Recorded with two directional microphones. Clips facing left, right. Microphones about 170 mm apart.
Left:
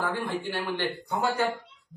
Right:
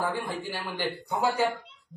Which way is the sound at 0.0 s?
15° right (ahead or behind).